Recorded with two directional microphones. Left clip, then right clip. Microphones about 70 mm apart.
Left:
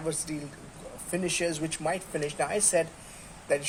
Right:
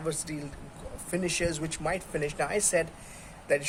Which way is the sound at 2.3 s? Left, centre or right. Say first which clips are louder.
Left 1 dB; right.